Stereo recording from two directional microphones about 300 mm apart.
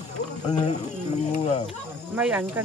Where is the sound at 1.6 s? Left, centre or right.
Centre.